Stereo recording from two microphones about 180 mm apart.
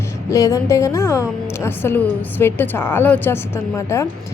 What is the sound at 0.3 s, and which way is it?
A woman's voice, 20° left (ahead or behind).